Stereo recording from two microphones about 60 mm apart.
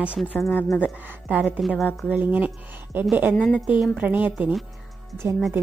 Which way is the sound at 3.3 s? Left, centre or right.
Centre.